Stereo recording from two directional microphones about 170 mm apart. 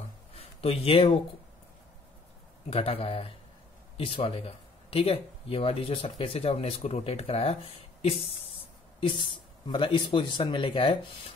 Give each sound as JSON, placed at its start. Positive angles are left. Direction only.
{"t": 0.4, "sound": "speech", "side_deg": 35}
{"t": 2.7, "sound": "speech", "side_deg": 35}
{"t": 9.0, "sound": "speech", "side_deg": 30}